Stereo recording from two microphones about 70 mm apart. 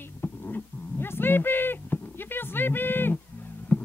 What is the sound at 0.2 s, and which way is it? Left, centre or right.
Dog, left.